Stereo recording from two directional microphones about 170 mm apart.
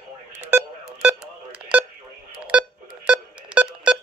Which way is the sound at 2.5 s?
5° right (ahead or behind).